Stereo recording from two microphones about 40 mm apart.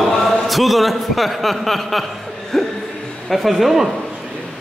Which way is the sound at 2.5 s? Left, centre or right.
Centre.